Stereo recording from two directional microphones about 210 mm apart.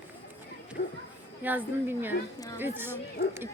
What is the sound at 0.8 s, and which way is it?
Speech, 45° left (ahead or behind).